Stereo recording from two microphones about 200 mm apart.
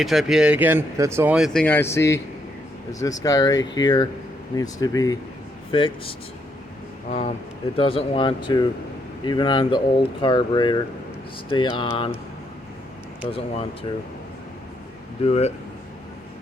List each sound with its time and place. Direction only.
0.0 s speech: centre (ahead or behind)
1.5 s speech: 10° left (ahead or behind); by 12.1 s 25° left (ahead or behind)
15.2 s speech: 30° left (ahead or behind)